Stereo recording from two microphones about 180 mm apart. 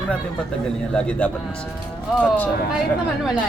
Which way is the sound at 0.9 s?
5° left (ahead or behind).